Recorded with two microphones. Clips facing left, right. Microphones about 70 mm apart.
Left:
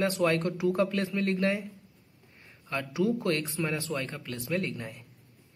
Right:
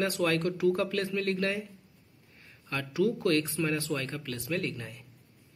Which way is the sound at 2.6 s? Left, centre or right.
Left.